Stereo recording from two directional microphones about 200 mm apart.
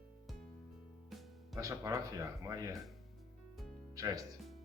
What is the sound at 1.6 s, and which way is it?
Speech, 15° right (ahead or behind).